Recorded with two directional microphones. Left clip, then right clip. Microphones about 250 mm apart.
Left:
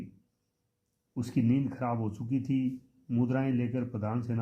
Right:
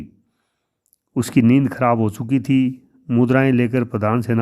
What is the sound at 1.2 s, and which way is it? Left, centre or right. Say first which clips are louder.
A man's voice: right 14 dB; right.